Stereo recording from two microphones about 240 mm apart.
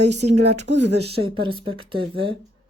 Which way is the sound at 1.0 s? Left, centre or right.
Right.